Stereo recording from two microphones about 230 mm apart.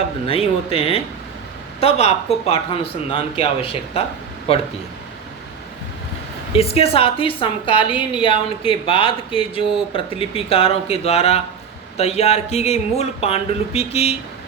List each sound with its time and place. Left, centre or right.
0.3 s speech: left
6.5 s speech: left